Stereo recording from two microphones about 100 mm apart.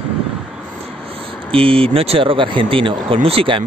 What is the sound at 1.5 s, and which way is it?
Speech, 65° right (ahead or behind).